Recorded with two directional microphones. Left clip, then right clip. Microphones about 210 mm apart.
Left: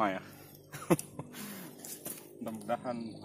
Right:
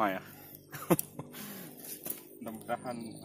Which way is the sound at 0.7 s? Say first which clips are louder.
Even; 10° right (ahead or behind).